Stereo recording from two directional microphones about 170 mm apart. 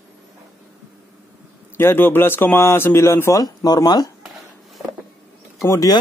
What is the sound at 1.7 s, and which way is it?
Speech, 15° left (ahead or behind).